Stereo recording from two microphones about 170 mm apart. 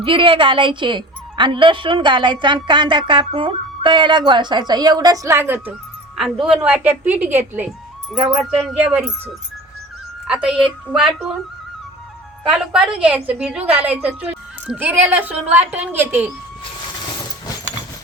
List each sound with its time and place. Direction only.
0.0 s a woman's voice: 30° right (ahead or behind); by 5.7 s 10° right (ahead or behind)
6.1 s a woman's voice: centre (ahead or behind)
8.1 s music: 5° right (ahead or behind)
12.5 s music: 5° right (ahead or behind)
13.7 s a woman's voice: 10° right (ahead or behind)